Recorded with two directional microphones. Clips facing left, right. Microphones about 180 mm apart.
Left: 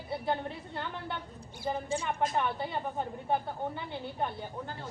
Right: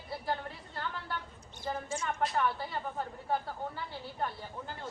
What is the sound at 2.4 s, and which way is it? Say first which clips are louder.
A woman's voice: left 1 dB; 20° left (ahead or behind).